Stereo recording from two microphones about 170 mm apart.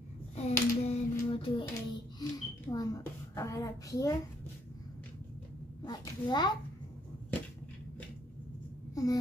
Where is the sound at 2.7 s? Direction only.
20° left (ahead or behind).